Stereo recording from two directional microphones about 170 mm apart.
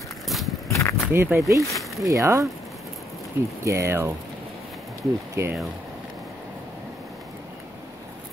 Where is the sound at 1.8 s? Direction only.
Centre (ahead or behind).